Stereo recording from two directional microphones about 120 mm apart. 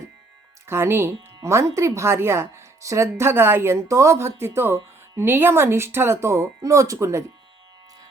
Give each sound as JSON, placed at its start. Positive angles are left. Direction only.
{"t": 0.7, "sound": "speech", "side_deg": -20}